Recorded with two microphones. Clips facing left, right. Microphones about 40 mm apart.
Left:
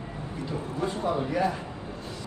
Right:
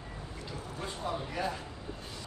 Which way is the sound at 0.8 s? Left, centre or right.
Left.